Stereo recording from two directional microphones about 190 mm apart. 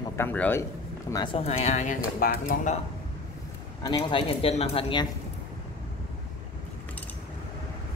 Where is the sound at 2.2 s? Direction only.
50° left (ahead or behind).